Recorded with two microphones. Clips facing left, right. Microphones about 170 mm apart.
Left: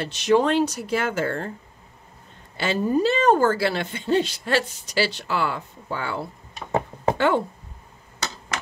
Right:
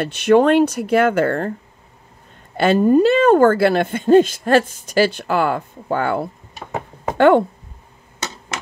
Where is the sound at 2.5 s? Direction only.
55° right (ahead or behind).